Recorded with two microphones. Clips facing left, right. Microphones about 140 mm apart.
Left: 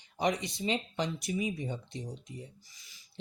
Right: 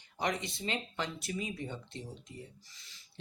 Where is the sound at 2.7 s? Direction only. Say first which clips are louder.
Right 1 dB; 10° left (ahead or behind).